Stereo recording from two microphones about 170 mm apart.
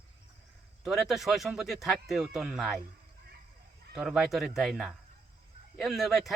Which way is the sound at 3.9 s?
5° right (ahead or behind).